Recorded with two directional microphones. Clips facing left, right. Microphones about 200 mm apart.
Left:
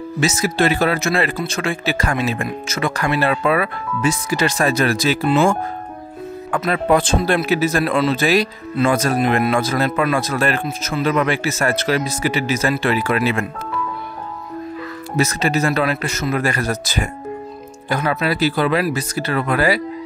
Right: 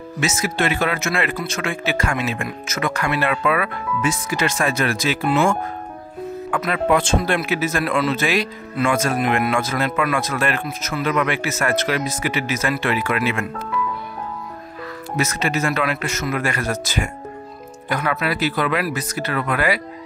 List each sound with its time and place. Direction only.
0.2 s speech: 35° left (ahead or behind)
15.1 s speech: 35° left (ahead or behind)